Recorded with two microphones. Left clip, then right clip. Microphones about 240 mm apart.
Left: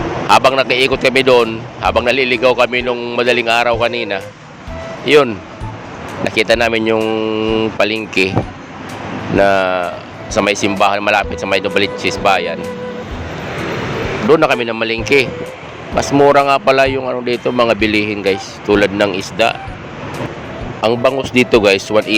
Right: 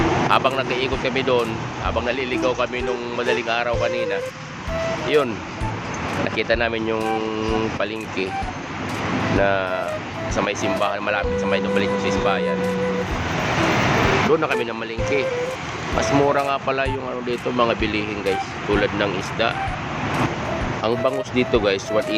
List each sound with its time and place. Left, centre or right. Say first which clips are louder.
0.3 s speech: left 9 dB; left
9.4 s speech: left 11 dB; left
14.3 s speech: left 8 dB; left
20.8 s speech: left 9 dB; left